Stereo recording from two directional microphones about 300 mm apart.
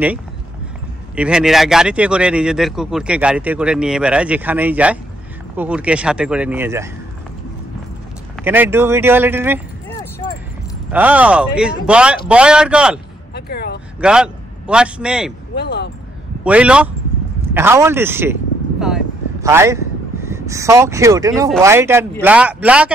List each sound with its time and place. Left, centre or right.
1.1 s speech: centre
8.5 s speech: centre
9.8 s keys jangling: centre
10.9 s speech: centre
13.3 s a sound: left
14.0 s a man's voice: centre
15.5 s speech: left
16.4 s speech: centre